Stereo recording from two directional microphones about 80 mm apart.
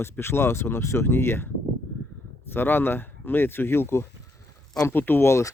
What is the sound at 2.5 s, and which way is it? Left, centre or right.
Speech, left.